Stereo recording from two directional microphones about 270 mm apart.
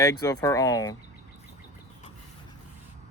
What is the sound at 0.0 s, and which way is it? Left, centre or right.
Speech, centre.